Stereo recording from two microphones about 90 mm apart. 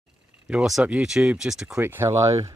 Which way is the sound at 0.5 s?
10° right (ahead or behind).